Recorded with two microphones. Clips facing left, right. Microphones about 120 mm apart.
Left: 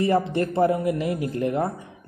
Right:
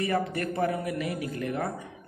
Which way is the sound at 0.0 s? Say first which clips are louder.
Left 6 dB; 30° left (ahead or behind).